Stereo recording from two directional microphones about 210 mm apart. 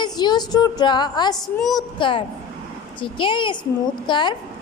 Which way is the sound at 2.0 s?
25° left (ahead or behind).